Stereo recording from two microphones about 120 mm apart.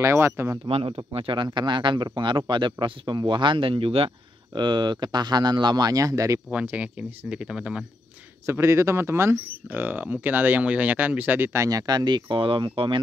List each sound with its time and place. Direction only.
0.0 s speech: 20° right (ahead or behind)
0.7 s speech: 55° right (ahead or behind)
4.6 s speech: 40° right (ahead or behind)
6.5 s speech: 10° right (ahead or behind)
8.5 s speech: 25° right (ahead or behind); by 13.0 s 45° right (ahead or behind)